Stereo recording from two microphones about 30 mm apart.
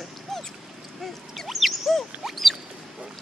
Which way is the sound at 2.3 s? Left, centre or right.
Centre.